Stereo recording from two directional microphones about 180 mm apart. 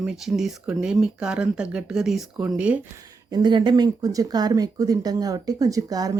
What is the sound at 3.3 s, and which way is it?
Speech, 25° right (ahead or behind).